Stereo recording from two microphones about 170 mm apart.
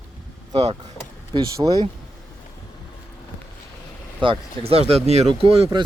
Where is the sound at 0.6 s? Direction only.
40° right (ahead or behind).